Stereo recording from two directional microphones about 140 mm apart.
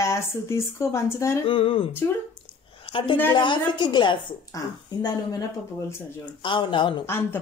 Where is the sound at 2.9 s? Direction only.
40° left (ahead or behind).